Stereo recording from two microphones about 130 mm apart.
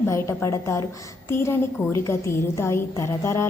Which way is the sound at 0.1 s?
20° left (ahead or behind).